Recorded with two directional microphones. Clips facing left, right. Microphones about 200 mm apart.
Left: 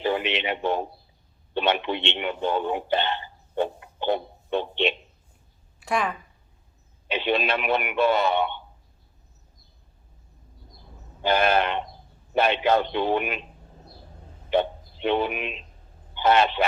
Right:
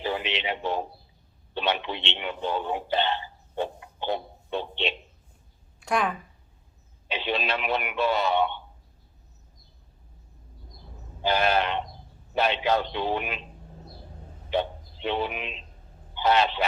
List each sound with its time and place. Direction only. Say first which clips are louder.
0.0 s radio: left 4 dB; 55° left (ahead or behind)
1.5 s speech: left 4 dB; 55° left (ahead or behind)
5.8 s a woman's voice: even; centre (ahead or behind)
7.1 s a man's voice: left 4 dB; 55° left (ahead or behind)
11.2 s a man's voice: left 2 dB; 55° left (ahead or behind)
14.5 s a man's voice: left 4 dB; 55° left (ahead or behind)